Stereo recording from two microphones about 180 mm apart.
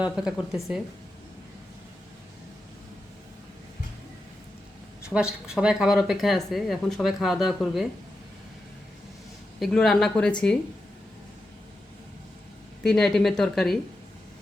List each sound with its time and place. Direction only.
0.3 s speech: centre (ahead or behind)
5.0 s speech: 5° right (ahead or behind)
9.6 s speech: centre (ahead or behind)
12.8 s speech: 5° left (ahead or behind)